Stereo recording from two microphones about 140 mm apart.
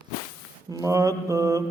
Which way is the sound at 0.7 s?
20° right (ahead or behind).